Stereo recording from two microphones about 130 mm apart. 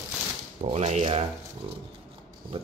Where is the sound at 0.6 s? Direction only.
55° right (ahead or behind).